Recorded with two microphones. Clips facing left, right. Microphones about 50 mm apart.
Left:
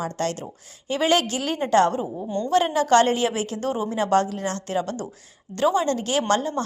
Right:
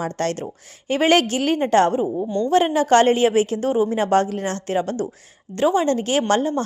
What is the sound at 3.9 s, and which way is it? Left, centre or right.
A woman's voice, right.